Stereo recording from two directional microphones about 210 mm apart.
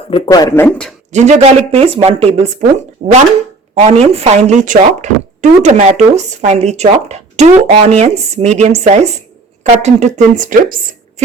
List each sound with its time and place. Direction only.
0.1 s speech: 20° left (ahead or behind)
1.1 s speech: 35° right (ahead or behind)